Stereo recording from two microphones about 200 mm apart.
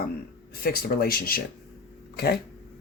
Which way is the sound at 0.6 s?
50° left (ahead or behind).